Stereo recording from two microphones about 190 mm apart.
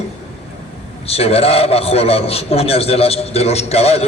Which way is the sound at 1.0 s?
30° left (ahead or behind).